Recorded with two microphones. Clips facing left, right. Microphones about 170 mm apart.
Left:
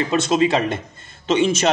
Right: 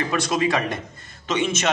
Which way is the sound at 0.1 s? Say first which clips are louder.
Left 5 dB; 25° left (ahead or behind).